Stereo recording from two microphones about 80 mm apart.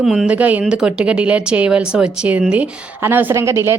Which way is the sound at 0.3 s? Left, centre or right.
Centre.